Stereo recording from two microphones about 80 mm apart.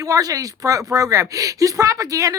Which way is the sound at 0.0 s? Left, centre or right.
Right.